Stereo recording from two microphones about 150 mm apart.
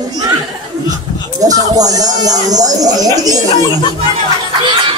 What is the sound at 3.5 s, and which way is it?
Speech, 25° left (ahead or behind).